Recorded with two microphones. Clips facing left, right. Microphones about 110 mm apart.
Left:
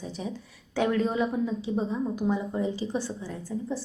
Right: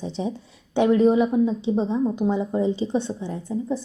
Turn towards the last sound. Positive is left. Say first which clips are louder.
# right 6 dB
turn(degrees=-25)  # may be behind; listen again after turning